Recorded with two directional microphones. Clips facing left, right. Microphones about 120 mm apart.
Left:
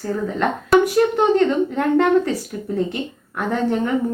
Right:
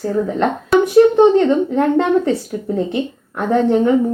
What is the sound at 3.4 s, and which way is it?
Speech, 25° right (ahead or behind).